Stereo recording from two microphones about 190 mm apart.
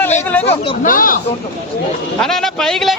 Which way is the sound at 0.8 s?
45° left (ahead or behind).